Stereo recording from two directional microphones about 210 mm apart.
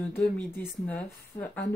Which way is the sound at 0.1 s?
10° left (ahead or behind).